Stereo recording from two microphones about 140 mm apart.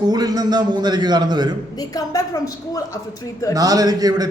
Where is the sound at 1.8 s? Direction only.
25° left (ahead or behind).